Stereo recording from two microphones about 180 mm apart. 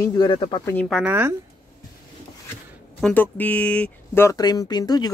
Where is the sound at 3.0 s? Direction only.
10° left (ahead or behind).